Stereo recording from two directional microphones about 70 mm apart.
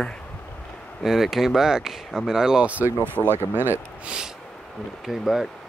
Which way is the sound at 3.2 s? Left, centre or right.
Right.